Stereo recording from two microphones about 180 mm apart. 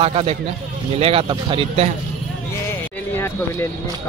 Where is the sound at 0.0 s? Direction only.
35° right (ahead or behind).